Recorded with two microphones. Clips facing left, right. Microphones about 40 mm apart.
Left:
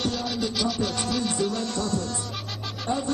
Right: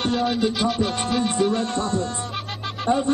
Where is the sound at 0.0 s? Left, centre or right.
Right.